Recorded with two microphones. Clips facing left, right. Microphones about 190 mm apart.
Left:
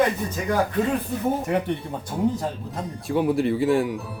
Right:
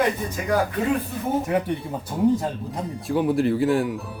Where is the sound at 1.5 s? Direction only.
Centre (ahead or behind).